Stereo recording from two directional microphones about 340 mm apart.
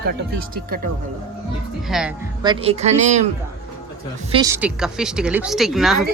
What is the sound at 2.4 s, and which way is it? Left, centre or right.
Speech, centre.